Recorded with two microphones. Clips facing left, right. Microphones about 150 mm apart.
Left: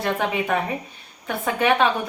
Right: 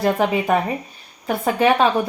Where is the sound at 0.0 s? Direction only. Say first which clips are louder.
Right 5 dB; 35° right (ahead or behind).